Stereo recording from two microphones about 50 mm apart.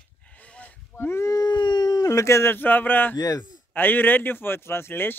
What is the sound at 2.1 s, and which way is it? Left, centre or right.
Speech, left.